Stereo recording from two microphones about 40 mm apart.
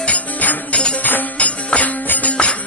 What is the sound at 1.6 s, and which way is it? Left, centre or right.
Music, left.